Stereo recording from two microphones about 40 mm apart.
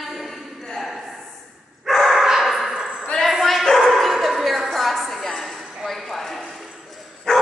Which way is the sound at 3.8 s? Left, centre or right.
Centre.